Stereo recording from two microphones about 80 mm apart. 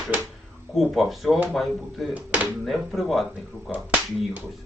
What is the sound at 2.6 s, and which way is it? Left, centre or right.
Speech, centre.